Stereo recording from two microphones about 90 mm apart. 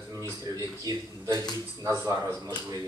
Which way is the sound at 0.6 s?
45° right (ahead or behind).